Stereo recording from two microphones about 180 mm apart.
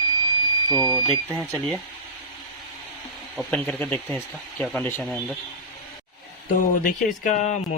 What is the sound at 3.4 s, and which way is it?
Speech, 5° left (ahead or behind).